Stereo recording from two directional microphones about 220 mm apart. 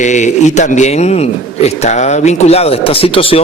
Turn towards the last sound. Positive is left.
turn(degrees=25)  # may be behind; listen again after turning